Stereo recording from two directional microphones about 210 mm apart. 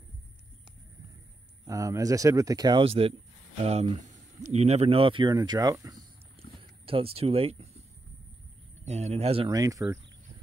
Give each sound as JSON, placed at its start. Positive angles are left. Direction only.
{"t": 1.7, "sound": "speech", "side_deg": -15}
{"t": 8.8, "sound": "speech", "side_deg": -30}